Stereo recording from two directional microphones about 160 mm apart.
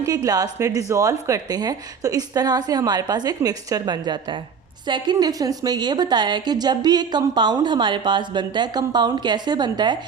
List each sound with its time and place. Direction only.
0.0 s a woman's voice: 20° right (ahead or behind)